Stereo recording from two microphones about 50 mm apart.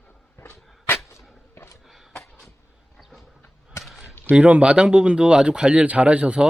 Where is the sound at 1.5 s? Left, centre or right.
Left.